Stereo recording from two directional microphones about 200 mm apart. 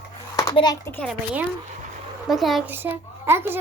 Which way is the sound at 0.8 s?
5° left (ahead or behind).